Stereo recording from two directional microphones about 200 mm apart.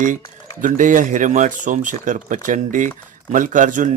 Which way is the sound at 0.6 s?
40° right (ahead or behind).